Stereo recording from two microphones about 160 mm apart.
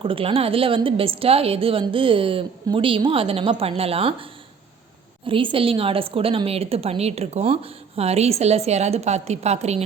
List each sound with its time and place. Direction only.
0.0 s a woman's voice: 35° right (ahead or behind)